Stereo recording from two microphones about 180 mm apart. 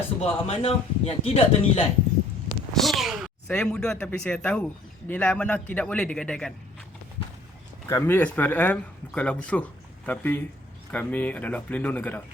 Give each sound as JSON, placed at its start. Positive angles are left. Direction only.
{"t": 0.2, "sound": "a man's voice", "side_deg": 35}
{"t": 2.7, "sound": "speech", "side_deg": 0}
{"t": 7.9, "sound": "speech", "side_deg": 15}